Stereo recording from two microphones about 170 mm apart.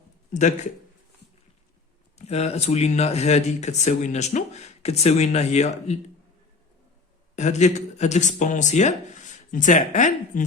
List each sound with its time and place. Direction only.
0.3 s speech: 45° left (ahead or behind)
2.1 s speech: 40° left (ahead or behind)
7.3 s speech: 45° left (ahead or behind)